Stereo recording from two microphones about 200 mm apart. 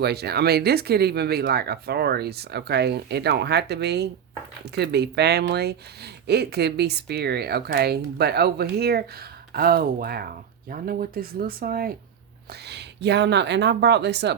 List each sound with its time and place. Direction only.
0.0 s speech: 55° right (ahead or behind)